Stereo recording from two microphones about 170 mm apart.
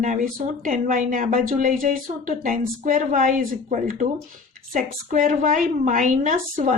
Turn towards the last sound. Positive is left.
turn(degrees=-50)  # may be behind; listen again after turning